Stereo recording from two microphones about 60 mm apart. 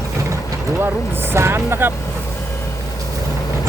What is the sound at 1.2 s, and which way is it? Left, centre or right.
Speech, right.